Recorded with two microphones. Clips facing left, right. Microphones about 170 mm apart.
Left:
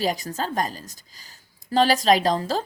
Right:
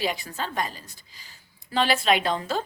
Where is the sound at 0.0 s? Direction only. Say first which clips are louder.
Left 4 dB; 40° left (ahead or behind).